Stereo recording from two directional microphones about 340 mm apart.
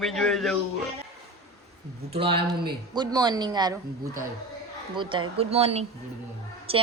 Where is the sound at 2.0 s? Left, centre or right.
Centre.